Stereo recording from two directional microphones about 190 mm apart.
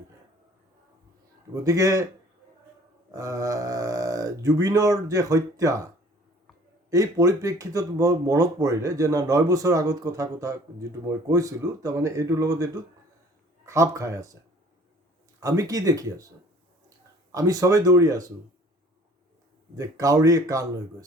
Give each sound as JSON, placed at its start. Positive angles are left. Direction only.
{"t": 1.5, "sound": "speech", "side_deg": -15}
{"t": 3.1, "sound": "speech", "side_deg": -15}
{"t": 6.9, "sound": "speech", "side_deg": -20}
{"t": 15.4, "sound": "speech", "side_deg": -20}
{"t": 17.3, "sound": "speech", "side_deg": -20}
{"t": 19.7, "sound": "speech", "side_deg": -20}